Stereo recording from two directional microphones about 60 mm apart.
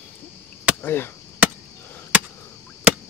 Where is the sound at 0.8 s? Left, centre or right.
Left.